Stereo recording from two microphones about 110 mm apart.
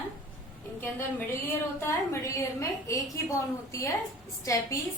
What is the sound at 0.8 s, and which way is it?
A woman's voice, 20° left (ahead or behind).